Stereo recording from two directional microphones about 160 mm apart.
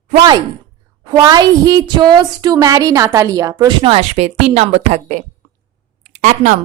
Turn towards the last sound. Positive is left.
turn(degrees=-50)  # may be behind; listen again after turning